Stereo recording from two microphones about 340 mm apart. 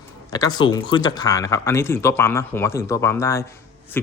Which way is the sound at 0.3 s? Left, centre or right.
Centre.